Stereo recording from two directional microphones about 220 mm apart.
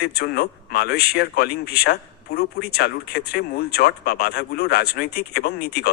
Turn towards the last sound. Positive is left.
turn(degrees=45)  # may be behind; listen again after turning